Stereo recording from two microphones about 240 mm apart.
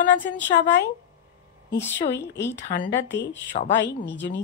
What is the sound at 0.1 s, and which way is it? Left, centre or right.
Speech, left.